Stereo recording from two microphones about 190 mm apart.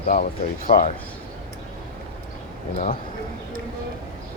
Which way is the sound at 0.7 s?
40° left (ahead or behind).